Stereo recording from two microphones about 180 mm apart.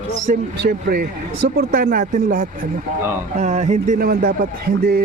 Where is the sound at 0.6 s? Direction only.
60° right (ahead or behind).